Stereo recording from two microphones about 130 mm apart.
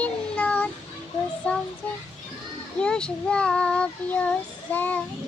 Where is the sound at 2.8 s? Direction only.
5° left (ahead or behind).